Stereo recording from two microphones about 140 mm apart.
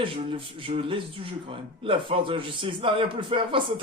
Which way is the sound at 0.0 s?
40° right (ahead or behind).